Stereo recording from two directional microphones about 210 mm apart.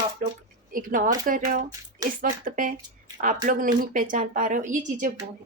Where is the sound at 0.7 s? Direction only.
40° right (ahead or behind).